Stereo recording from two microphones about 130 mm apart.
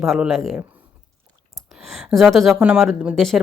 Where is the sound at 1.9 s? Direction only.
Centre (ahead or behind).